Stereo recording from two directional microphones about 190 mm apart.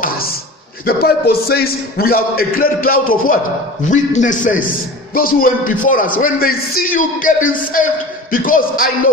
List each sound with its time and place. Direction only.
0.8 s a man's voice: 55° left (ahead or behind)